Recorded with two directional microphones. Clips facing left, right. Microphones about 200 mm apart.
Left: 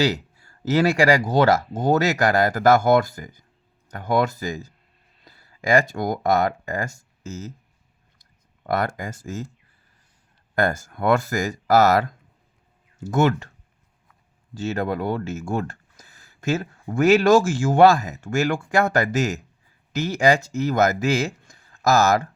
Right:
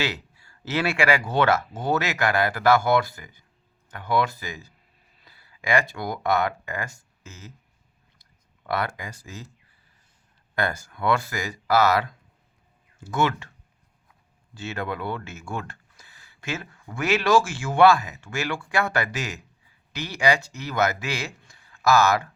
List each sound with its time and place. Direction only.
0.0 s speech: 45° left (ahead or behind)
10.5 s speech: 45° left (ahead or behind)
14.5 s a man's voice: 40° left (ahead or behind)